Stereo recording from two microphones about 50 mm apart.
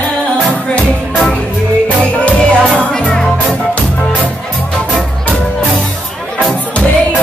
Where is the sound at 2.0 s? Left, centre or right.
Left.